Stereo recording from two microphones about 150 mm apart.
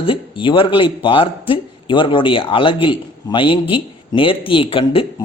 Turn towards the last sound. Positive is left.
turn(degrees=40)  # may be behind; listen again after turning